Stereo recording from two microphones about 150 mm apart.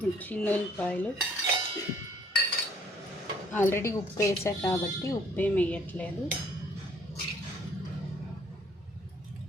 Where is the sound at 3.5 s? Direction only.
15° left (ahead or behind).